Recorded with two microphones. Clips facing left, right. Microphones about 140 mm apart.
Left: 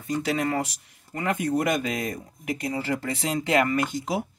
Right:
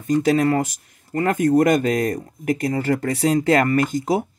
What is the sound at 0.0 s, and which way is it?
Speech, 45° right (ahead or behind).